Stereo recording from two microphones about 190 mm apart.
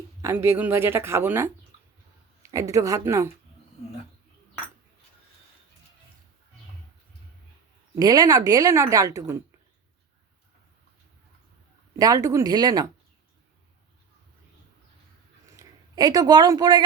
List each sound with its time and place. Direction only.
0.2 s a woman's voice: 15° right (ahead or behind)
7.9 s a woman's voice: 20° right (ahead or behind)
11.9 s speech: 20° right (ahead or behind)
15.5 s speech: 20° right (ahead or behind)